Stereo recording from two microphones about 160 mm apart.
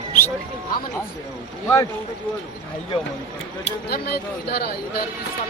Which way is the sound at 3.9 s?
75° left (ahead or behind).